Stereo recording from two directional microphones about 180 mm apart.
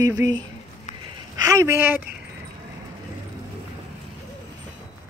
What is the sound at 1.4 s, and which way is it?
Speech, 15° right (ahead or behind).